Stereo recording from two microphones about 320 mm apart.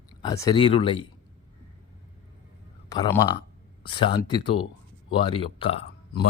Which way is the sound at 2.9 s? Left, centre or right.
Centre.